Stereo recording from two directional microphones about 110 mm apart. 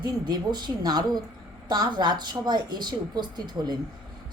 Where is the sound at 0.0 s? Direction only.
40° right (ahead or behind).